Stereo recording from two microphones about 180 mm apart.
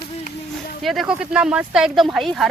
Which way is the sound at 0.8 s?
5° right (ahead or behind).